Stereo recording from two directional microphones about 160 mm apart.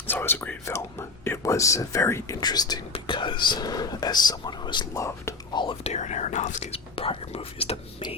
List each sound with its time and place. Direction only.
0.1 s speech: 15° left (ahead or behind)
5.8 s speech: 45° left (ahead or behind)